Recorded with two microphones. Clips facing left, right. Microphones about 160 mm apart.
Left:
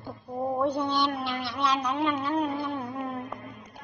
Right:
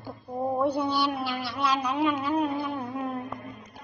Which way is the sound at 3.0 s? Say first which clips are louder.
Right 2 dB; 5° right (ahead or behind).